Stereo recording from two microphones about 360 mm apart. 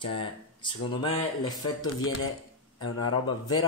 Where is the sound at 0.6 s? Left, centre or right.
Centre.